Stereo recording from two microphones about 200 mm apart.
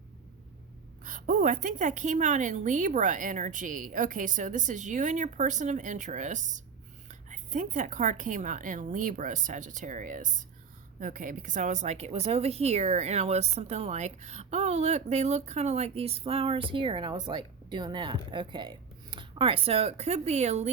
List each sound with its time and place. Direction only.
1.0 s a woman's voice: 40° right (ahead or behind)